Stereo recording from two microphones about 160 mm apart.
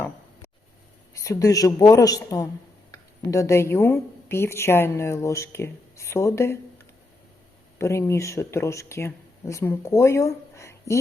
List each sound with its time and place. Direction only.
1.2 s a woman's voice: 20° left (ahead or behind)
7.8 s a woman's voice: 15° left (ahead or behind)